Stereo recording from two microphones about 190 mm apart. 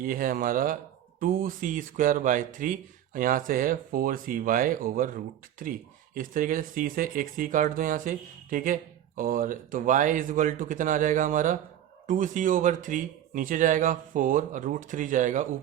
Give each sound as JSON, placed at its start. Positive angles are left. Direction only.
{"t": 0.0, "sound": "speech", "side_deg": -50}